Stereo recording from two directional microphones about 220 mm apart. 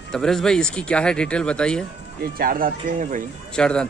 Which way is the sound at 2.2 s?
40° right (ahead or behind).